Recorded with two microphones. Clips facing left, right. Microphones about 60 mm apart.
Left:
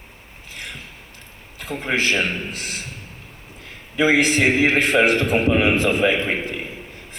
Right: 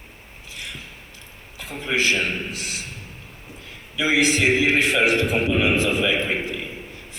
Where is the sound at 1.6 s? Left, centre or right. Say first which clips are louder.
Left 1 dB; left.